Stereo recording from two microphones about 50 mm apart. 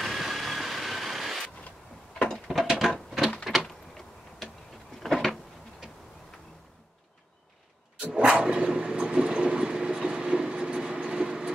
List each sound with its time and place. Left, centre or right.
0.0 s vehicle: centre
2.1 s mechanisms: centre
2.4 s mechanisms: centre
2.8 s a sound: centre
3.6 s a sound: centre
5.0 s cupboard open or close: centre
8.1 s vehicle: centre